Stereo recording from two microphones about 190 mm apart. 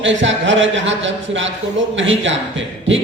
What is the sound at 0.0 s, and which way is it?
A man's voice, 80° right.